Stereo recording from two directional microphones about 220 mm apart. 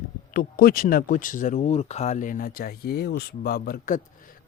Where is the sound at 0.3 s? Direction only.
45° left (ahead or behind).